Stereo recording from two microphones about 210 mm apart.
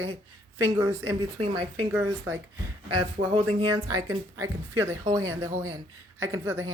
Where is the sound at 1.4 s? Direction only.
25° right (ahead or behind).